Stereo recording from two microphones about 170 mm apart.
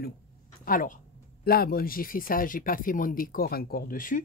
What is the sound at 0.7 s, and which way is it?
Speech, 55° left (ahead or behind).